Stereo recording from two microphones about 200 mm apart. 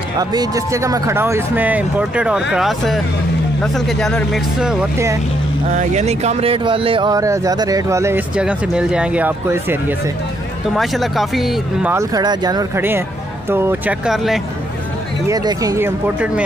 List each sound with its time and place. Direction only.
0.2 s speech: 20° right (ahead or behind); by 4.7 s centre (ahead or behind)
5.7 s speech: 35° right (ahead or behind); by 9.9 s 10° right (ahead or behind)
10.7 s speech: centre (ahead or behind)
15.2 s speech: 20° right (ahead or behind)